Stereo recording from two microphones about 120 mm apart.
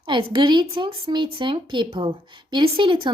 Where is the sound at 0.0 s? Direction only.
45° right (ahead or behind).